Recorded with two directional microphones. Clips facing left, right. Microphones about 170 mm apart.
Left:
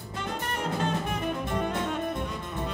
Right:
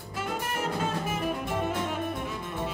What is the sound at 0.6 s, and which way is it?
Music, 5° right (ahead or behind).